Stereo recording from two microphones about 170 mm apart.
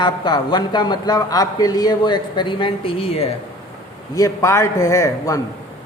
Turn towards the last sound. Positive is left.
turn(degrees=20)  # may be behind; listen again after turning